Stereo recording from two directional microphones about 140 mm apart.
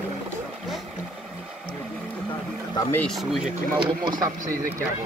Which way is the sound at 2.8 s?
20° left (ahead or behind).